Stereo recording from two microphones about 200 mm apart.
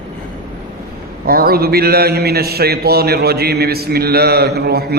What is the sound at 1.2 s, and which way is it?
Mantra, 50° right (ahead or behind).